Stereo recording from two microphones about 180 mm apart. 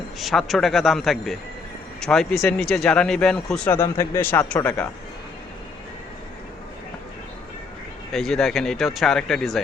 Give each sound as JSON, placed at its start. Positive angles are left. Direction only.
{"t": 0.2, "sound": "speech", "side_deg": 0}
{"t": 8.1, "sound": "speech", "side_deg": 0}